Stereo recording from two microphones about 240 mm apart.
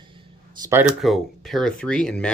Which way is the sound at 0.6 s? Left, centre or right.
Centre.